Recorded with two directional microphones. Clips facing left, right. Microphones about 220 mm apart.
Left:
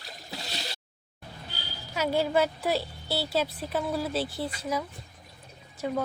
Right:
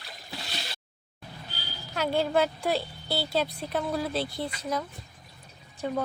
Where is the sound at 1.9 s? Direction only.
5° left (ahead or behind).